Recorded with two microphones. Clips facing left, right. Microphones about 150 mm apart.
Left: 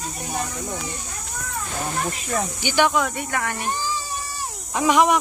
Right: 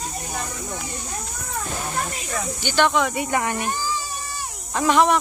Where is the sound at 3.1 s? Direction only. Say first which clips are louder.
Right 4 dB; 20° right (ahead or behind).